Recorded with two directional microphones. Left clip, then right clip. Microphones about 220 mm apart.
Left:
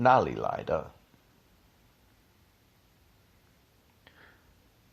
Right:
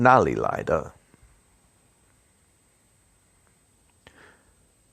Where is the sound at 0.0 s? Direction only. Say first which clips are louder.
Right 5 dB; 50° right (ahead or behind).